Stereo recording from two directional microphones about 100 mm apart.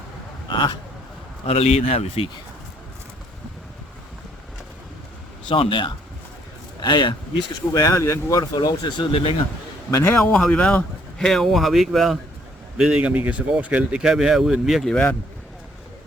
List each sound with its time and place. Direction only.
0.4 s speech: 50° left (ahead or behind)
1.5 s speech: 90° left
5.5 s speech: 60° left (ahead or behind)
6.7 s speech: 45° left (ahead or behind)
9.9 s a man's voice: 25° left (ahead or behind)
10.3 s speech: 5° left (ahead or behind)